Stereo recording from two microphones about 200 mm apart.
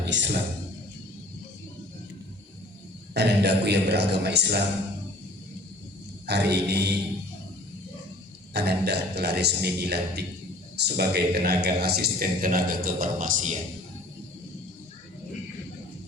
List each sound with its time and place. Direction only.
0.0 s a sound: 65° right (ahead or behind)
3.2 s a man's voice: 60° right (ahead or behind)
6.2 s a man's voice: 55° right (ahead or behind)
8.5 s a man's voice: 55° right (ahead or behind)